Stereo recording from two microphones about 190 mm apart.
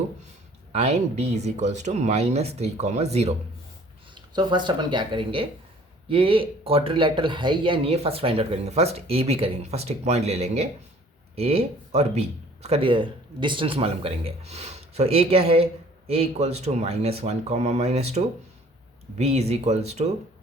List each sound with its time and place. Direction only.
0.7 s speech: 35° right (ahead or behind)
4.1 s speech: 25° right (ahead or behind)